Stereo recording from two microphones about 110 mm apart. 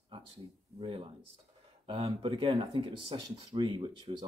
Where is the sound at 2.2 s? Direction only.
55° right (ahead or behind).